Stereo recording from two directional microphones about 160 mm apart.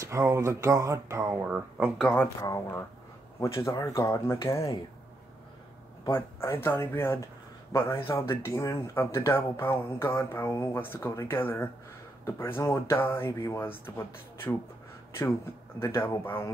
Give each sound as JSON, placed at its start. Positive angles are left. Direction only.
{"t": 0.0, "sound": "speech", "side_deg": -20}
{"t": 2.0, "sound": "speech", "side_deg": 10}
{"t": 2.4, "sound": "speech", "side_deg": 20}
{"t": 6.0, "sound": "speech", "side_deg": 15}
{"t": 15.8, "sound": "speech", "side_deg": 15}